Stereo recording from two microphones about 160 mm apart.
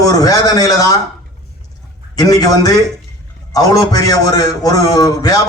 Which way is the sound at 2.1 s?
25° left (ahead or behind).